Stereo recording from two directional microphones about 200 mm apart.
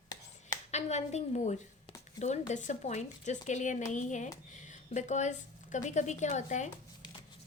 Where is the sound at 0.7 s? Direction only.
35° left (ahead or behind).